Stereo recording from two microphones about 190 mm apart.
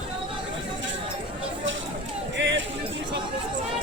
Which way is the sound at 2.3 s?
70° right (ahead or behind).